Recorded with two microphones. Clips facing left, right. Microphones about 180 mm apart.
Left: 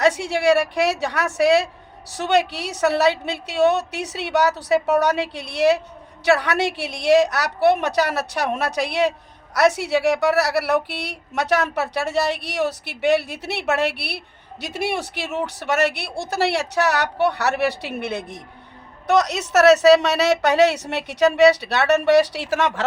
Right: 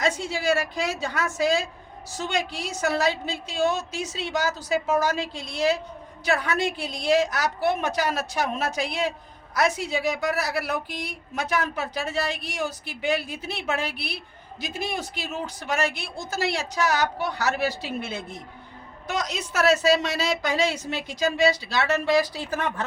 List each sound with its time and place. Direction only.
0.0 s a woman's voice: 70° left (ahead or behind); by 22.8 s 90° left